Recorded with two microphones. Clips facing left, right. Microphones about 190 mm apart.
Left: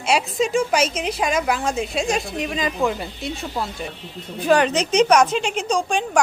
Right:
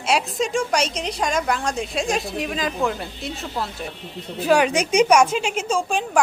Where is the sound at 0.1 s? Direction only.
Centre (ahead or behind).